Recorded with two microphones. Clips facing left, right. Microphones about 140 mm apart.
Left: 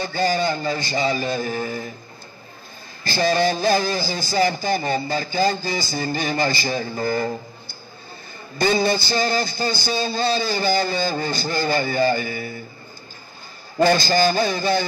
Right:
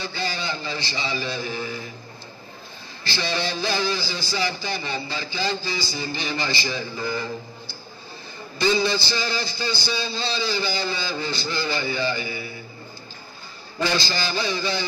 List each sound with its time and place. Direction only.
0.0 s speech: 45° left (ahead or behind)
3.0 s speech: 45° left (ahead or behind)
13.7 s speech: 50° left (ahead or behind)